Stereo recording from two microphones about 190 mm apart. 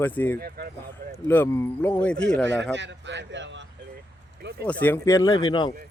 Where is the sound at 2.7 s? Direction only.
70° right (ahead or behind).